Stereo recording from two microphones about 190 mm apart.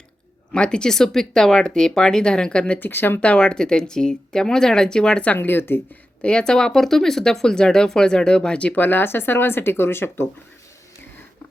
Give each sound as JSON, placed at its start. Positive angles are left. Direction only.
{"t": 0.5, "sound": "speech", "side_deg": 5}